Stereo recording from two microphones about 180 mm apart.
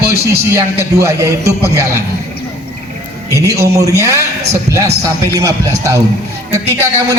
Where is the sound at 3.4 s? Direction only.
15° right (ahead or behind).